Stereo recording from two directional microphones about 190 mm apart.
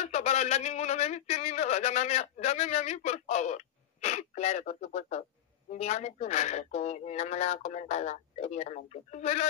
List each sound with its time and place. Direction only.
0.0 s speech: 35° left (ahead or behind)